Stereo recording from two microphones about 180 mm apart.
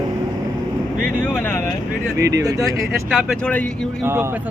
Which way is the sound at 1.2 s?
5° left (ahead or behind).